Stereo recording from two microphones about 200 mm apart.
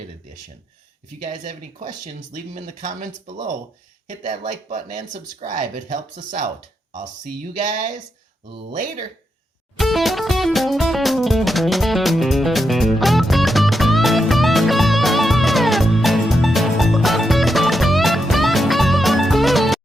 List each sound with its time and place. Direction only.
1.2 s speech: 40° right (ahead or behind)
4.9 s speech: 25° right (ahead or behind)
5.5 s speech: 40° right (ahead or behind)
7.6 s speech: 40° right (ahead or behind)
9.7 s music: centre (ahead or behind)